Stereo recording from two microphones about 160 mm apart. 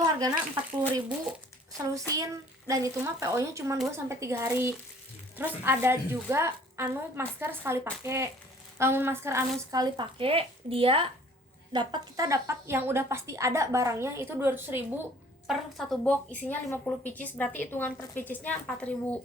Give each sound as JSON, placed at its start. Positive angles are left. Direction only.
{"t": 0.0, "sound": "a sound", "side_deg": -25}
{"t": 2.1, "sound": "a woman's voice", "side_deg": -20}
{"t": 15.4, "sound": "a woman's voice", "side_deg": 5}